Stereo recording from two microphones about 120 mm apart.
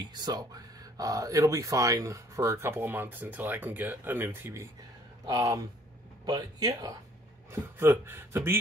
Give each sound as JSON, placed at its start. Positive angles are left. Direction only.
{"t": 0.0, "sound": "speech", "side_deg": -35}
{"t": 7.5, "sound": "speech", "side_deg": -20}